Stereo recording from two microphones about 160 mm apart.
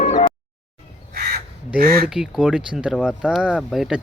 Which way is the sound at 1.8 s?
70° right (ahead or behind).